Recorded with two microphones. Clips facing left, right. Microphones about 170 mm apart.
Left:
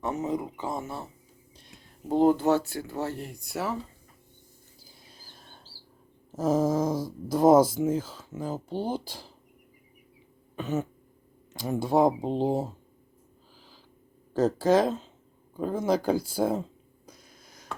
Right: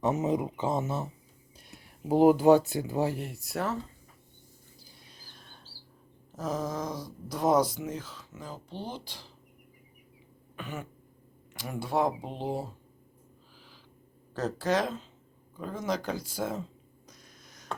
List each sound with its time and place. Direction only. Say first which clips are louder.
0.0 s speech: right 2 dB; 20° right (ahead or behind)
1.5 s speech: right 2 dB; 5° right (ahead or behind)
3.2 s speech: even; centre (ahead or behind)
6.3 s speech: left 8 dB; 25° left (ahead or behind)
8.4 s speech: left 9 dB; 45° left (ahead or behind)
10.5 s throat clearing: left 9 dB; 40° left (ahead or behind)
11.6 s speech: left 7 dB; 20° left (ahead or behind)
11.9 s speech: left 6 dB; 40° left (ahead or behind)
14.3 s speech: left 7 dB; 25° left (ahead or behind)
17.1 s a sound: left 4 dB; 30° left (ahead or behind)